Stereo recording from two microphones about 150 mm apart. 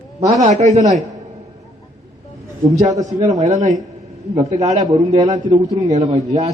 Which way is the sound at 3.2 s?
50° right (ahead or behind).